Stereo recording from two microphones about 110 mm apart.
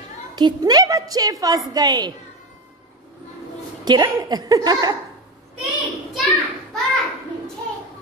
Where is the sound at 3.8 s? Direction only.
40° right (ahead or behind).